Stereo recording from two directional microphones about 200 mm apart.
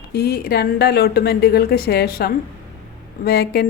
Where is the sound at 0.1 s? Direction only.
50° left (ahead or behind).